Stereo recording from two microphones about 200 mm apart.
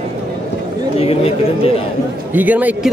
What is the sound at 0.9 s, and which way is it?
Speech, 30° left (ahead or behind).